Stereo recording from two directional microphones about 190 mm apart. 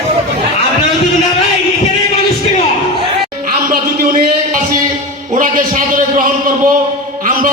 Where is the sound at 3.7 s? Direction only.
50° right (ahead or behind).